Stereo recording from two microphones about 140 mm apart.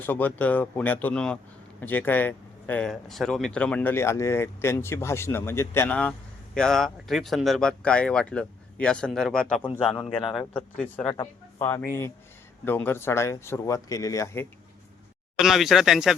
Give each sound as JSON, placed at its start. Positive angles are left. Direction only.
{"t": 0.0, "sound": "speech", "side_deg": 10}
{"t": 15.4, "sound": "speech", "side_deg": 0}